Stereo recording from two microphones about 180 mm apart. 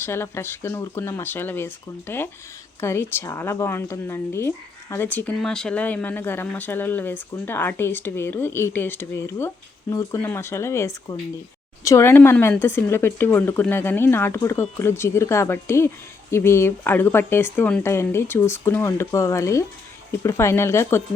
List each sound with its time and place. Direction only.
0.0 s speech: 15° left (ahead or behind)